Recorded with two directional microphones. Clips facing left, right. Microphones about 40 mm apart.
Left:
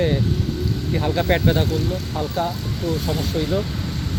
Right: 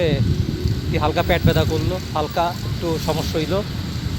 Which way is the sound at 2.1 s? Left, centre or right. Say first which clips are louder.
Right 5 dB; right.